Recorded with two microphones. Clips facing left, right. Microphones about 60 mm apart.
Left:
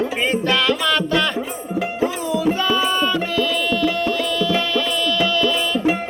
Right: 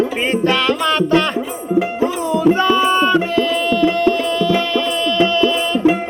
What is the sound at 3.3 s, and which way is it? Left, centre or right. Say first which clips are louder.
Tabla: right 4 dB; right.